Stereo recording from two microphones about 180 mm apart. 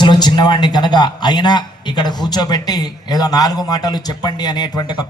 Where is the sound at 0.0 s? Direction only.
25° left (ahead or behind).